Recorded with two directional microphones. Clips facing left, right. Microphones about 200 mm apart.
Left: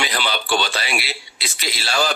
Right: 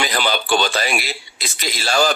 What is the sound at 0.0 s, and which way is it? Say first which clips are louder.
Speech: right 3 dB; 45° right (ahead or behind).